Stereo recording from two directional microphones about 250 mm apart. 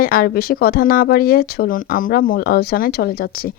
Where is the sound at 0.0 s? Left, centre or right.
Left.